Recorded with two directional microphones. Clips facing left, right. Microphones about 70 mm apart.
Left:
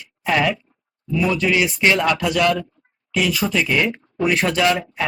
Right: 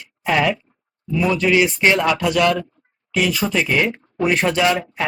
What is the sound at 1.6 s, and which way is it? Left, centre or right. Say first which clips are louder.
Speech: right 2 dB; centre.